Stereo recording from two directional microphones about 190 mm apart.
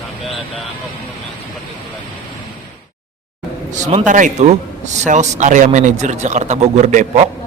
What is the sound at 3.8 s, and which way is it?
A man's voice, 40° right (ahead or behind).